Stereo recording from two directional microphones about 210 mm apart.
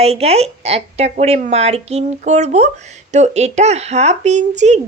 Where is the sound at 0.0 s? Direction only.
30° right (ahead or behind).